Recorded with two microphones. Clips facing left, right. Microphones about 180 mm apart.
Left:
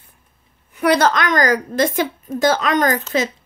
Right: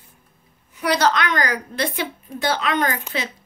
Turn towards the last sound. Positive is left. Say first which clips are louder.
# left 5 dB
turn(degrees=45)  # may be behind; listen again after turning